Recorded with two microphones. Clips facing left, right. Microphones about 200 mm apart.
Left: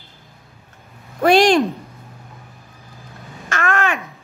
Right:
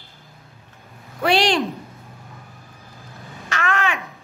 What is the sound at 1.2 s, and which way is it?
Speech, 45° left (ahead or behind).